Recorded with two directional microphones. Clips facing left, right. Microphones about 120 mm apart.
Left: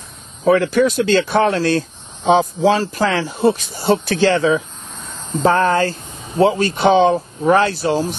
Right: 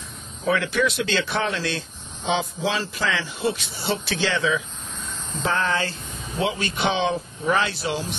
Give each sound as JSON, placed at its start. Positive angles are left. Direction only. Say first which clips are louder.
{"t": 0.5, "sound": "speech", "louder": "left 8 dB", "side_deg": 40}